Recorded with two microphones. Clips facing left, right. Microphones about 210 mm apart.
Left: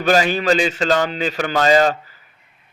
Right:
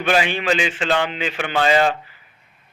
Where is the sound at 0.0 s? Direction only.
40° left (ahead or behind).